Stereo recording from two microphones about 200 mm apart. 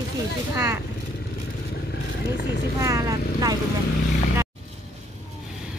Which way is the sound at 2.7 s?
15° right (ahead or behind).